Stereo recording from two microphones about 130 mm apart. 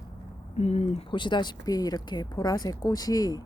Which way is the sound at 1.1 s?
35° left (ahead or behind).